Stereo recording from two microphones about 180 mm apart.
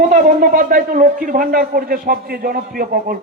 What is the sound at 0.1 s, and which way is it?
A man's voice, 50° right (ahead or behind).